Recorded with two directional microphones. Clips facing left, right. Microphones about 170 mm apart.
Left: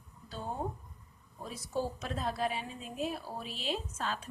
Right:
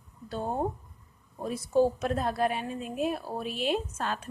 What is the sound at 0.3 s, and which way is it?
Speech, 55° right (ahead or behind).